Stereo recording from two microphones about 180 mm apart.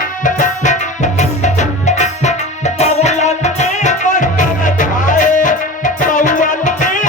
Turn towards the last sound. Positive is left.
turn(degrees=45)  # may be behind; listen again after turning